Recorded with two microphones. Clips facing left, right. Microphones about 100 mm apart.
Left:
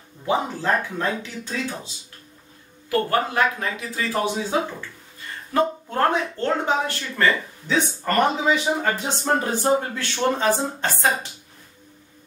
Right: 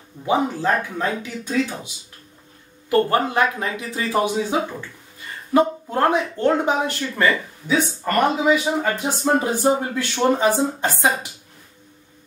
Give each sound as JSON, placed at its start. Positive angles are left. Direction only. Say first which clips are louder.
{"t": 0.2, "sound": "speech", "louder": "right 3 dB", "side_deg": -15}
{"t": 2.9, "sound": "a man's voice", "louder": "right 4 dB", "side_deg": -20}